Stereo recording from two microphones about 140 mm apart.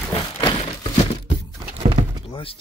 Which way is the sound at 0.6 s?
45° left (ahead or behind).